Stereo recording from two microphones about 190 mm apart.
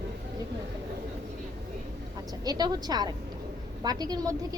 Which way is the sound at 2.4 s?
20° right (ahead or behind).